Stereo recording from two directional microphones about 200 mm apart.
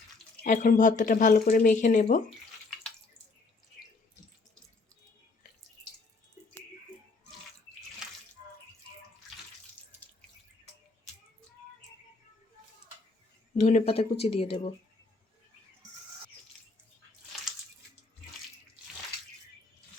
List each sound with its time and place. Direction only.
0.4 s speech: 40° left (ahead or behind)
13.6 s speech: 35° left (ahead or behind)